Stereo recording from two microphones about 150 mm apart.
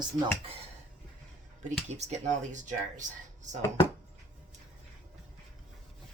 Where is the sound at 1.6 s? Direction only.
50° right (ahead or behind).